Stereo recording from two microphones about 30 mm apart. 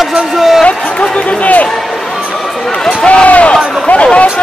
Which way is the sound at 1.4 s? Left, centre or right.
Left.